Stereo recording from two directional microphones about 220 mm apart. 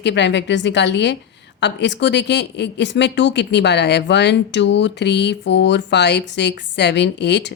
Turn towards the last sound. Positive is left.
turn(degrees=50)  # may be behind; listen again after turning